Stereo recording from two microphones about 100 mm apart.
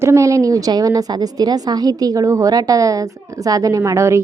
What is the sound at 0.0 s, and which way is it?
A woman's voice, 30° right (ahead or behind).